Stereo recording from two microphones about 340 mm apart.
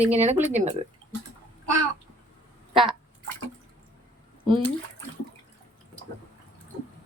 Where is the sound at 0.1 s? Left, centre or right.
Centre.